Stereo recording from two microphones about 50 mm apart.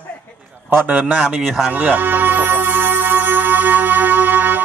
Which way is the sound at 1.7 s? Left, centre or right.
Right.